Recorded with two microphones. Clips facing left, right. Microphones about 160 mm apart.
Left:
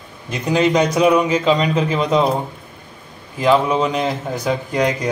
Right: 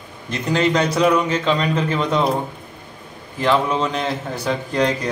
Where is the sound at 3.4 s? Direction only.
10° left (ahead or behind).